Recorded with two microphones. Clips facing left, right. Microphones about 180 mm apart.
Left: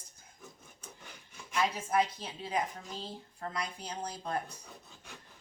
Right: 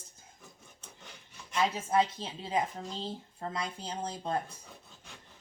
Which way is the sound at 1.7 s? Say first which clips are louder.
Right 2 dB; 25° right (ahead or behind).